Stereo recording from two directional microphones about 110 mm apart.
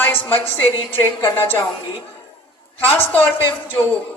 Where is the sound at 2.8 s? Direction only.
15° left (ahead or behind).